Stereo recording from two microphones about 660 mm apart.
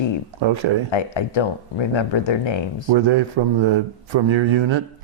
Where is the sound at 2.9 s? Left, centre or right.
Right.